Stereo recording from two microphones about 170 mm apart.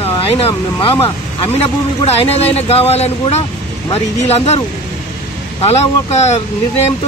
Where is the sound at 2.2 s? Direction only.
35° left (ahead or behind).